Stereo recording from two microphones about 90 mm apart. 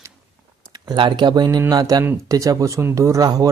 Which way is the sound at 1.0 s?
60° right (ahead or behind).